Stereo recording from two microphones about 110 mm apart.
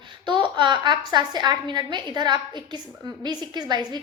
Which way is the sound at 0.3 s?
45° right (ahead or behind).